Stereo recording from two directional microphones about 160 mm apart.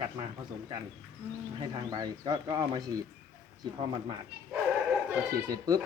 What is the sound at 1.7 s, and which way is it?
Speech, 25° right (ahead or behind).